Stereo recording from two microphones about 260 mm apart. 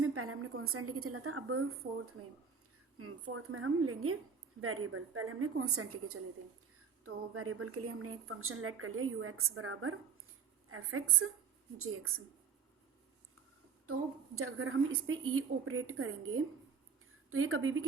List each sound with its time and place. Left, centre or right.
0.0 s a woman's voice: right
3.0 s a woman's voice: right
14.3 s a woman's voice: right